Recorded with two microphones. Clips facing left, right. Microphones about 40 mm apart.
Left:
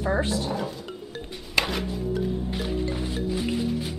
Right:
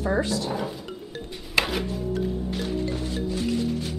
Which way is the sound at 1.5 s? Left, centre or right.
Centre.